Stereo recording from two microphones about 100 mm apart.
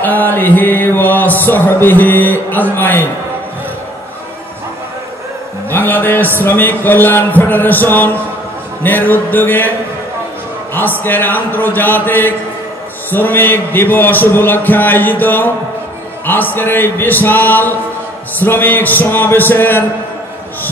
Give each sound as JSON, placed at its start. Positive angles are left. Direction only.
{"t": 0.0, "sound": "music", "side_deg": 15}
{"t": 5.7, "sound": "a sound", "side_deg": 20}
{"t": 6.4, "sound": "music", "side_deg": 20}
{"t": 10.7, "sound": "music", "side_deg": 20}